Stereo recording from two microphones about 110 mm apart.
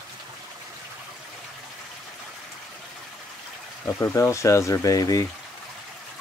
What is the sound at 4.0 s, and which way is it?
Speech, 25° left (ahead or behind).